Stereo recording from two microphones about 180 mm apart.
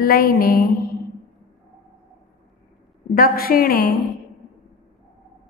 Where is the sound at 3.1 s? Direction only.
55° left (ahead or behind).